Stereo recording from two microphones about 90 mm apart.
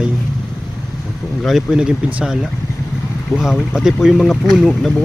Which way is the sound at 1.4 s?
5° right (ahead or behind).